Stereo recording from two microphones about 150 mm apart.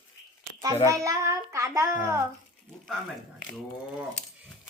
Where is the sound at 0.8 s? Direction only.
20° right (ahead or behind).